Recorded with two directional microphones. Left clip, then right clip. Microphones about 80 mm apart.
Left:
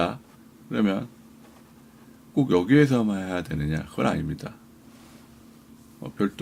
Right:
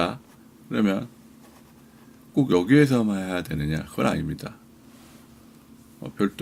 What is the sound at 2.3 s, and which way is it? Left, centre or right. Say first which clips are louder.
Speech: right 1 dB; right.